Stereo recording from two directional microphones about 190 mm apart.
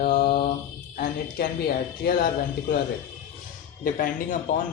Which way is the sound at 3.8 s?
45° left (ahead or behind).